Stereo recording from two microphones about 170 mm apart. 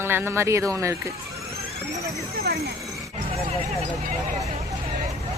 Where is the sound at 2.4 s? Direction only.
70° right (ahead or behind).